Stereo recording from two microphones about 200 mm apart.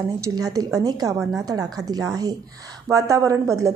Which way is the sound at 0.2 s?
20° right (ahead or behind).